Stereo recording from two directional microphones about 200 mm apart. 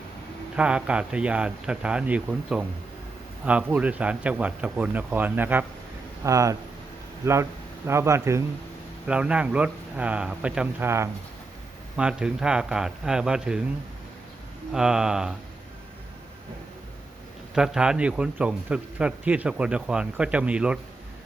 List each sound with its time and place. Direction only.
0.5 s a man's voice: 5° right (ahead or behind)
7.9 s a man's voice: 15° right (ahead or behind)
14.7 s a man's voice: 5° right (ahead or behind)
17.5 s a man's voice: 5° right (ahead or behind)